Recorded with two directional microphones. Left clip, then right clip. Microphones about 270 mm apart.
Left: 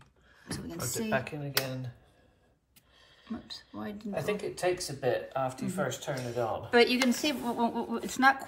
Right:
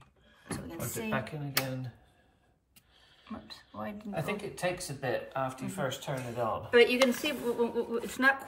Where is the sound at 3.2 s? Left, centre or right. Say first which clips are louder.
Left 3 dB; centre.